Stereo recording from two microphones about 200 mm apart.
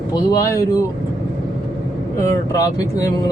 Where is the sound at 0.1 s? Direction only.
20° left (ahead or behind).